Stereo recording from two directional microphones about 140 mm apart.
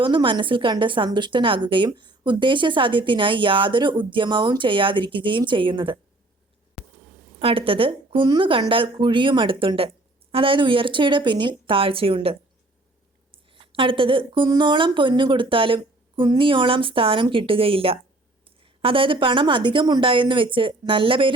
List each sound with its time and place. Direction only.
0.0 s speech: 35° right (ahead or behind)
6.8 s a sound: centre (ahead or behind)
7.3 s speech: 40° right (ahead or behind)